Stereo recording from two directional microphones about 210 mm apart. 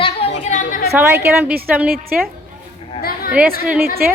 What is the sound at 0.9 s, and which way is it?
Speech, 10° right (ahead or behind).